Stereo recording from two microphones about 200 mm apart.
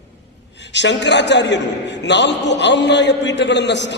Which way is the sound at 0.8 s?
60° left (ahead or behind).